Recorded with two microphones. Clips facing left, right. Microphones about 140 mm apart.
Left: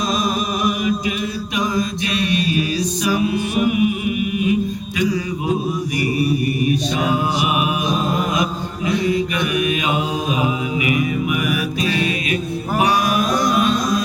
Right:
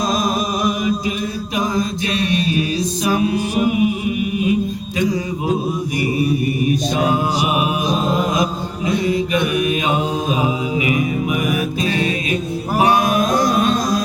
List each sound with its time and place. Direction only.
2.1 s music: 25° right (ahead or behind)
3.2 s mantra: 35° right (ahead or behind)
6.9 s mantra: 30° right (ahead or behind)
11.4 s music: 30° right (ahead or behind)